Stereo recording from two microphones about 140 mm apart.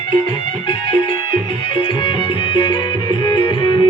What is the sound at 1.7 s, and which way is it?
Music, 35° left (ahead or behind).